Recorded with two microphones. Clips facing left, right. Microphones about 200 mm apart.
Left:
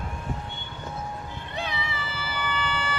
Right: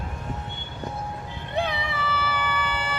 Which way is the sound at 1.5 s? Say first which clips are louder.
Right 6 dB; 60° right (ahead or behind).